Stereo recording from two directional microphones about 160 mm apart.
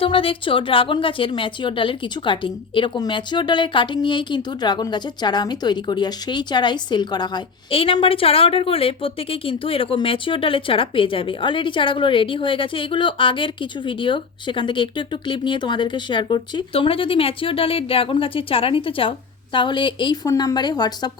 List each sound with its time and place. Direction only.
0.0 s a woman's voice: 35° left (ahead or behind)